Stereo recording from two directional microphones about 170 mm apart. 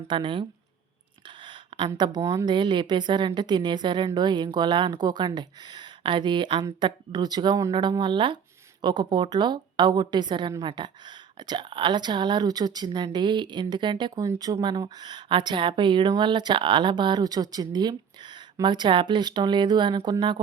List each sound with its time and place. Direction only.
0.1 s a woman's voice: 30° right (ahead or behind)
1.5 s a sound: 30° right (ahead or behind)
2.0 s a woman's voice: 25° right (ahead or behind)